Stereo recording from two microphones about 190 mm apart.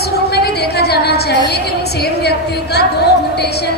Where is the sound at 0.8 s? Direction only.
60° left (ahead or behind).